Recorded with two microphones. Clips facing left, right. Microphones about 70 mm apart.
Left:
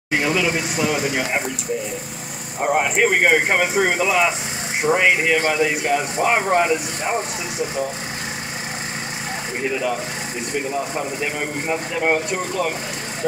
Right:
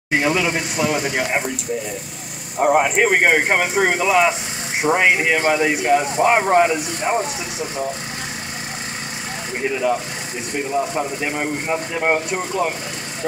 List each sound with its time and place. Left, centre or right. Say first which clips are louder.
0.2 s speech: even; centre
2.6 s speech: right 3 dB; centre
9.7 s speech: right 4 dB; centre